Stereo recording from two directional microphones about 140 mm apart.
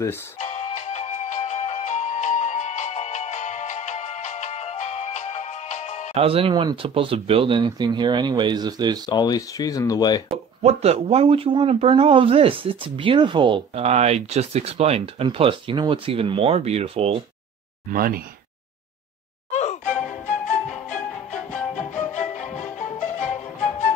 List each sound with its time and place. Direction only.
0.5 s music: 50° left (ahead or behind)
6.1 s speech: 40° right (ahead or behind)
9.1 s speech: 30° left (ahead or behind)
10.6 s speech: 50° right (ahead or behind)
13.8 s speech: 50° right (ahead or behind)
17.8 s speech: 90° right
19.5 s music: 55° left (ahead or behind)
21.7 s music: 60° left (ahead or behind)